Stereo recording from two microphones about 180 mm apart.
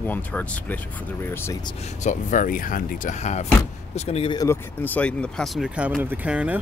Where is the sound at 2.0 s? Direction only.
45° left (ahead or behind).